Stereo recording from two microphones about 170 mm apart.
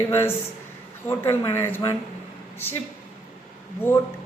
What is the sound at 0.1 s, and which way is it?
Speech, 15° left (ahead or behind).